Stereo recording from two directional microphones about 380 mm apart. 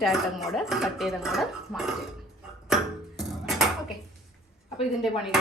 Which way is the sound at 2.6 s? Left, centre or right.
Centre.